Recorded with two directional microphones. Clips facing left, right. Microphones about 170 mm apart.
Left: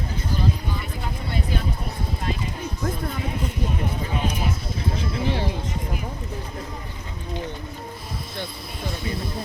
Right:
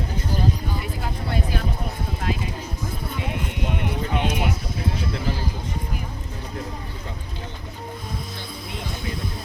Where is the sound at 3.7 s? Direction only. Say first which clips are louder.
Right 2 dB; 70° right (ahead or behind).